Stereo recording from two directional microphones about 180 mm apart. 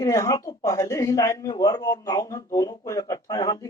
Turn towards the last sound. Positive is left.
turn(degrees=20)  # may be behind; listen again after turning